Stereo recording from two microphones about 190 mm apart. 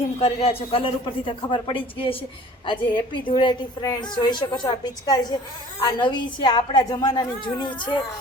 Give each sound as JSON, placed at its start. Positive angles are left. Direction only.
{"t": 0.2, "sound": "a woman's voice", "side_deg": 30}